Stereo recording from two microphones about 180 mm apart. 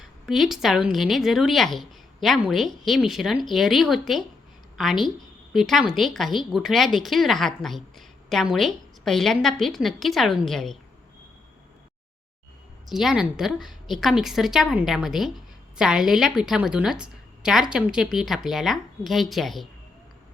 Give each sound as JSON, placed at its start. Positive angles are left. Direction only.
{"t": 0.0, "sound": "a woman's voice", "side_deg": 0}
{"t": 12.9, "sound": "a woman's voice", "side_deg": 0}